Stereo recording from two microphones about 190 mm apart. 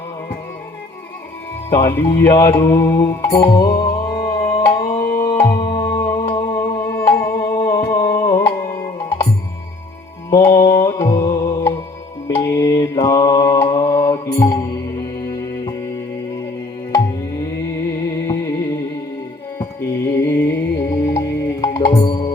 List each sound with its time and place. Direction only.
1.7 s music: 15° left (ahead or behind)
4.4 s tabla: 30° left (ahead or behind)
5.2 s music: 15° left (ahead or behind)
10.2 s music: 15° left (ahead or behind)
12.3 s mantra: 15° left (ahead or behind)
15.3 s music: 20° left (ahead or behind)
19.5 s music: 15° left (ahead or behind)